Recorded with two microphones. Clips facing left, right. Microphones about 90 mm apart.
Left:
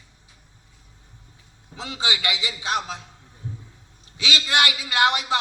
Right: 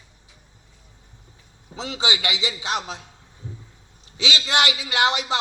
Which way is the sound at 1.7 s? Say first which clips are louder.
Right 2 dB; 20° right (ahead or behind).